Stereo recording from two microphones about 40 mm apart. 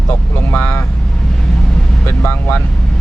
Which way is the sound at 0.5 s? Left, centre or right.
Left.